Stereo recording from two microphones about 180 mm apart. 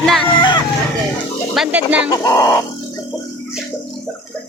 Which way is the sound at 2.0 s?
20° left (ahead or behind).